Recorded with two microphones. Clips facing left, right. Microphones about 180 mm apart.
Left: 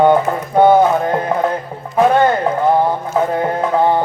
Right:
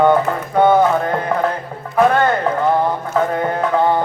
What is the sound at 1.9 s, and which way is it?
Music, 20° left (ahead or behind).